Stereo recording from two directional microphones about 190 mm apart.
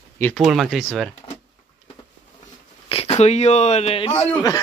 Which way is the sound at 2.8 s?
30° left (ahead or behind).